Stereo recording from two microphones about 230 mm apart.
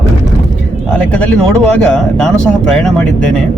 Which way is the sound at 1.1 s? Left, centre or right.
Centre.